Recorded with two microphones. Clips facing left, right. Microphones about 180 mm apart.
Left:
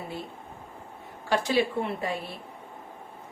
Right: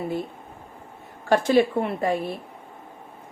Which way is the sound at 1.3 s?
50° right (ahead or behind).